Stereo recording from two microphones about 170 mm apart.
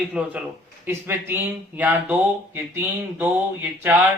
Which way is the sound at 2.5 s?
10° right (ahead or behind).